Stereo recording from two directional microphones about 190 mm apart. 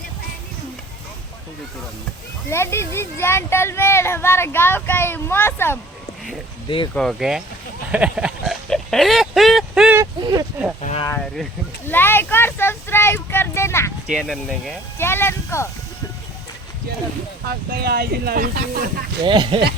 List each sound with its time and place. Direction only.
2.5 s speech: 15° left (ahead or behind)
6.7 s speech: 25° left (ahead or behind)
6.9 s speech: centre (ahead or behind)
7.9 s oink: 5° right (ahead or behind)
10.0 s a sound: 20° right (ahead or behind)
10.8 s a sound: 35° left (ahead or behind)
11.9 s speech: 10° left (ahead or behind)
14.1 s speech: centre (ahead or behind)
14.9 s speech: 10° left (ahead or behind)
17.7 s speech: 55° right (ahead or behind)
19.2 s speech: 25° right (ahead or behind)